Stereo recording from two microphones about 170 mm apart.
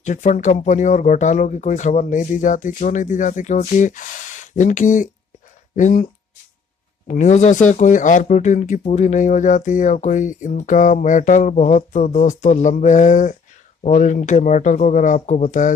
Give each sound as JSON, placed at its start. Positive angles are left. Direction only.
{"t": 0.0, "sound": "speech", "side_deg": 45}
{"t": 7.1, "sound": "speech", "side_deg": 45}